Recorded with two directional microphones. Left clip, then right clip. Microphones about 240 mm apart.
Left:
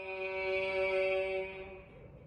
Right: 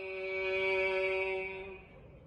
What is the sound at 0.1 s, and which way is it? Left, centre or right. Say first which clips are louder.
Music: even; left.